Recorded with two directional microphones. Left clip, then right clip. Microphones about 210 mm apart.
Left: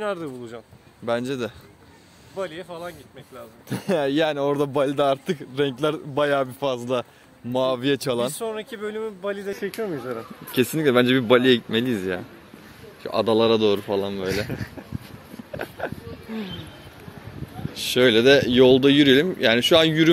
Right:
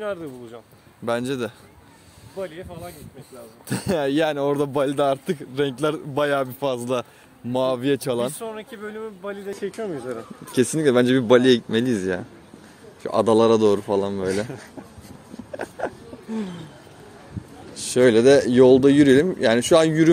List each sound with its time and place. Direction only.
0.0 s speech: 50° left (ahead or behind)
1.0 s a man's voice: 15° right (ahead or behind)
2.3 s speech: 20° left (ahead or behind)
3.6 s a man's voice: 20° right (ahead or behind); by 8.4 s centre (ahead or behind)
8.4 s speech: 35° left (ahead or behind)
10.5 s a man's voice: 10° right (ahead or behind)
13.0 s a man's voice: 30° right (ahead or behind)
15.5 s a sound: 15° right (ahead or behind)
17.7 s a man's voice: 15° right (ahead or behind)